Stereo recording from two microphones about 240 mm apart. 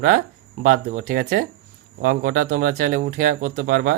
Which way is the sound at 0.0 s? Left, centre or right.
Right.